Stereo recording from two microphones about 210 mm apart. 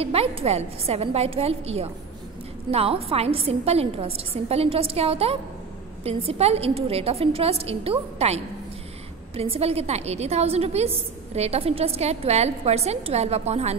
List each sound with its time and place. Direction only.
0.0 s a woman's voice: 30° right (ahead or behind)
9.4 s a woman's voice: 30° right (ahead or behind)